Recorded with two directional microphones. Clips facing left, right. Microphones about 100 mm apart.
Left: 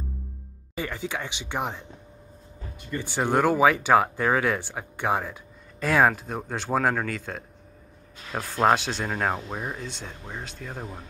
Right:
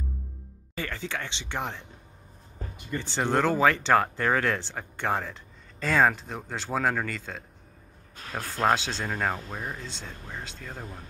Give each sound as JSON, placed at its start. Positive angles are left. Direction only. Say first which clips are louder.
{"t": 0.7, "sound": "speech", "louder": "left 3 dB", "side_deg": 15}
{"t": 3.0, "sound": "speech", "louder": "left 2 dB", "side_deg": 10}